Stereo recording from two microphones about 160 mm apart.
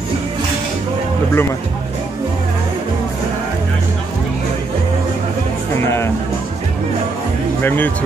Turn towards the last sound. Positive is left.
turn(degrees=10)  # may be behind; listen again after turning